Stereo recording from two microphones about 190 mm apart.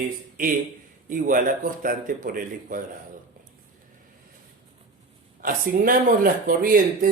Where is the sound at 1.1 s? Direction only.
45° right (ahead or behind).